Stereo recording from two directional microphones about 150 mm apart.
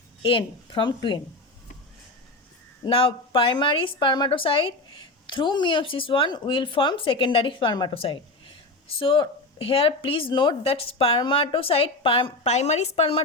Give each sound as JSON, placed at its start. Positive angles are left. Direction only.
{"t": 0.2, "sound": "a woman's voice", "side_deg": 35}
{"t": 2.8, "sound": "a woman's voice", "side_deg": 35}